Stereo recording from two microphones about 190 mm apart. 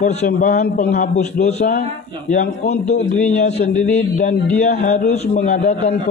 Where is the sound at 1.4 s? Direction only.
40° left (ahead or behind).